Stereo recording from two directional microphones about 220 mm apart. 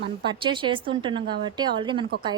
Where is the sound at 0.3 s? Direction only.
20° right (ahead or behind).